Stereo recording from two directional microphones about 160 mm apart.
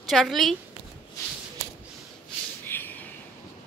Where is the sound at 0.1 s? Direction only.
Centre (ahead or behind).